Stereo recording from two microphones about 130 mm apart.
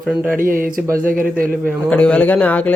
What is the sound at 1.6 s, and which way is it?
Speech, 10° left (ahead or behind).